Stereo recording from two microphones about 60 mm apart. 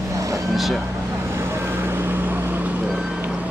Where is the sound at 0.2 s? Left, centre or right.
Right.